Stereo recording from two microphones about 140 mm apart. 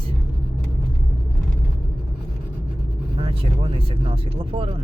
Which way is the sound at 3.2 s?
40° right (ahead or behind).